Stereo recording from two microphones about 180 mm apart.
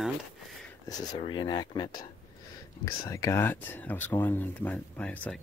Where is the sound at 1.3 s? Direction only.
25° left (ahead or behind); by 5.3 s 5° left (ahead or behind).